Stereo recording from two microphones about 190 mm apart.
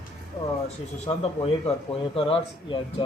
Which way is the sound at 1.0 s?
30° left (ahead or behind).